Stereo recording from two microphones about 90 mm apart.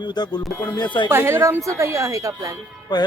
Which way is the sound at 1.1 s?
30° right (ahead or behind).